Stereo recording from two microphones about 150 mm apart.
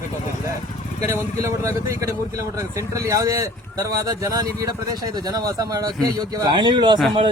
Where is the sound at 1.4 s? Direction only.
20° right (ahead or behind).